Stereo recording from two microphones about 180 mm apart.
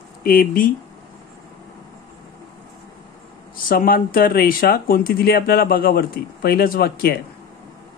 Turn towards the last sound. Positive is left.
turn(degrees=60)  # may be behind; listen again after turning